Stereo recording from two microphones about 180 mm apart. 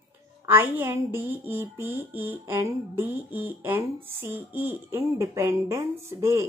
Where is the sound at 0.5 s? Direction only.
10° right (ahead or behind).